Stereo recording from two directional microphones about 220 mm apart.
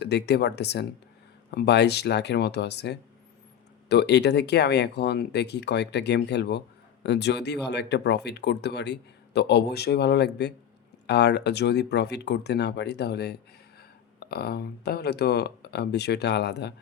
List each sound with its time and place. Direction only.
0.0 s speech: 50° left (ahead or behind)